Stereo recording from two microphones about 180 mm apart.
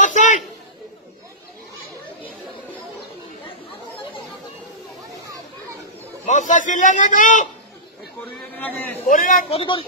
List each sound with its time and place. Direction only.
0.1 s a sound: 45° left (ahead or behind)
6.2 s a man's voice: 45° left (ahead or behind)
8.3 s a man's voice: 10° left (ahead or behind)
9.0 s a man's voice: 50° left (ahead or behind)
9.5 s speech: 30° left (ahead or behind)